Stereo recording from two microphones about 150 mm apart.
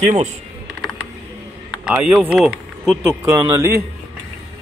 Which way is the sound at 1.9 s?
5° right (ahead or behind).